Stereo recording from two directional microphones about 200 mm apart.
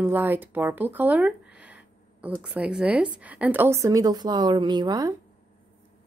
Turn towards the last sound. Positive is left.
turn(degrees=-20)  # may be behind; listen again after turning